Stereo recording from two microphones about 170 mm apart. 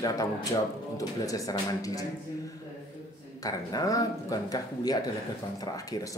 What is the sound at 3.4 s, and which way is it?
Speech, 20° left (ahead or behind).